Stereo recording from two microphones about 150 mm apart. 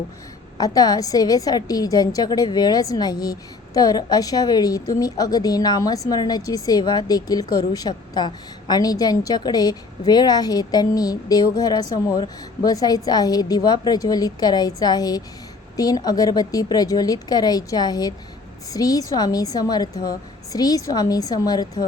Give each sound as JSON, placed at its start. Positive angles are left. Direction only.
{"t": 0.6, "sound": "a woman's voice", "side_deg": 25}